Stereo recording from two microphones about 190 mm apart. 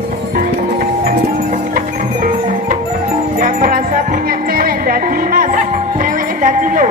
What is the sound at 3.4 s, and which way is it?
Music, 45° right (ahead or behind).